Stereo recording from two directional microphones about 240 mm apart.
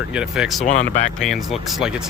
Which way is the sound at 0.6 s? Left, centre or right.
Left.